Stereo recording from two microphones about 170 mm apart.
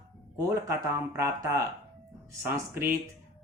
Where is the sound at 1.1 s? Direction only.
15° right (ahead or behind).